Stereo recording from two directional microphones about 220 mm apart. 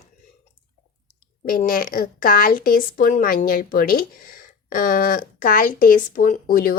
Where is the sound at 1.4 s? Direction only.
40° left (ahead or behind).